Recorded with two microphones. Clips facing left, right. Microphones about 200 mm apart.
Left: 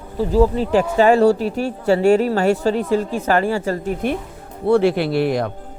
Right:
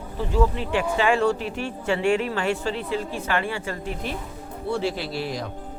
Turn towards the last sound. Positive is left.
turn(degrees=60)  # may be behind; listen again after turning